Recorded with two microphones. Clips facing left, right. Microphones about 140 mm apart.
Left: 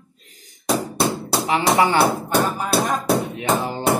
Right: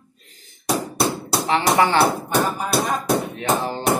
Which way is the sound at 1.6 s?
20° left (ahead or behind).